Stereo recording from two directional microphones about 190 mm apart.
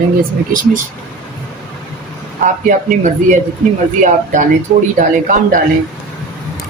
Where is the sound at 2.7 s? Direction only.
40° right (ahead or behind).